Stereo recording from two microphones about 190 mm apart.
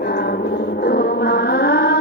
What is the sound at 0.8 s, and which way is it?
Music, 55° left (ahead or behind).